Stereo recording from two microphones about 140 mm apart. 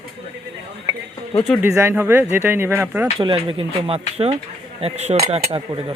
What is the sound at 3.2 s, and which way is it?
A man's voice, 40° right (ahead or behind).